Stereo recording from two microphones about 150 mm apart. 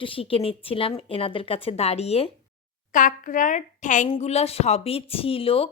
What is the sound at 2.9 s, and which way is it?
A woman's voice, 60° left (ahead or behind).